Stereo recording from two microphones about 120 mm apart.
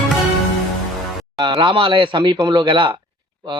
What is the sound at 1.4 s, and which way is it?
Speech, 45° right (ahead or behind).